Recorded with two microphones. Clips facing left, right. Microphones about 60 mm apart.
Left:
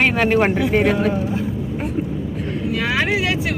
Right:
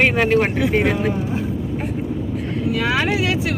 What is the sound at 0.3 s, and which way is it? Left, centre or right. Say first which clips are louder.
Speech: left 1 dB; centre.